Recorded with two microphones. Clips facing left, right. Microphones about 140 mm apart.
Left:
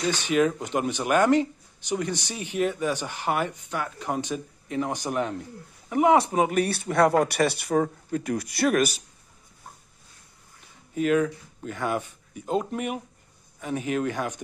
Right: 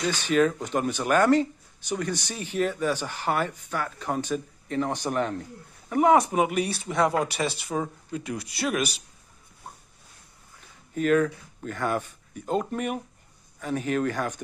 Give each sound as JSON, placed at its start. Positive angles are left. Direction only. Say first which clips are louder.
{"t": 0.0, "sound": "speech", "louder": "even", "side_deg": 15}
{"t": 6.1, "sound": "speech", "louder": "even", "side_deg": 30}
{"t": 6.5, "sound": "speech", "louder": "left 3 dB", "side_deg": 55}
{"t": 11.0, "sound": "speech", "louder": "even", "side_deg": 10}